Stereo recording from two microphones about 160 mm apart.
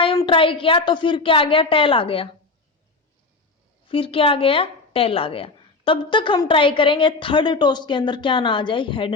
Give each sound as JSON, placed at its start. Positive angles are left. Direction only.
{"t": 0.3, "sound": "a woman's voice", "side_deg": 35}
{"t": 3.8, "sound": "a woman's voice", "side_deg": 35}